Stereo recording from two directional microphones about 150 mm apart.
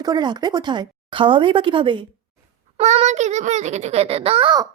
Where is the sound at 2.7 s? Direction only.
50° right (ahead or behind).